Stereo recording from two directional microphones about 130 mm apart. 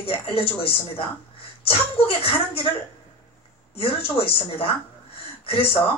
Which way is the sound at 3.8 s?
45° left (ahead or behind).